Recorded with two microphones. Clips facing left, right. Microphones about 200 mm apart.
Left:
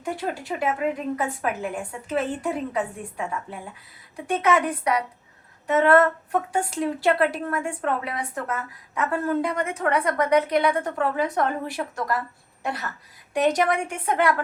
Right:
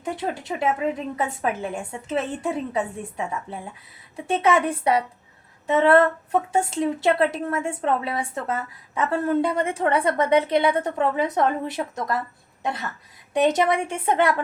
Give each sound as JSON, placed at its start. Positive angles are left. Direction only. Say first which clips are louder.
{"t": 0.0, "sound": "a woman's voice", "louder": "right 1 dB", "side_deg": -20}
{"t": 4.3, "sound": "a woman's voice", "louder": "right 1 dB", "side_deg": -25}
{"t": 13.3, "sound": "a woman's voice", "louder": "right 2 dB", "side_deg": -25}